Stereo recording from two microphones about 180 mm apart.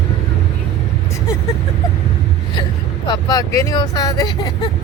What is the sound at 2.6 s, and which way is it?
Speech, 25° left (ahead or behind).